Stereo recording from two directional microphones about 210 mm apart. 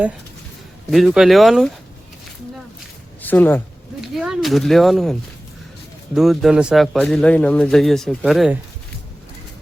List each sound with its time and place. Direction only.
0.9 s a man's voice: centre (ahead or behind)
3.2 s speech: 10° left (ahead or behind)
4.1 s a man's voice: centre (ahead or behind)
6.1 s a man's voice: centre (ahead or behind)